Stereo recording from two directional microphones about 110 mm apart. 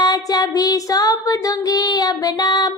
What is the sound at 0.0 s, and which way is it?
Child singing, 35° left (ahead or behind).